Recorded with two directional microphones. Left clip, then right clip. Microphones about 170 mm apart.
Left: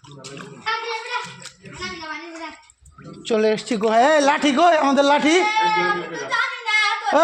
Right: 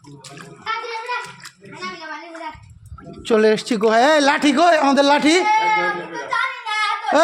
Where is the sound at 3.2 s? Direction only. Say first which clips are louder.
Right 4 dB; 35° right (ahead or behind).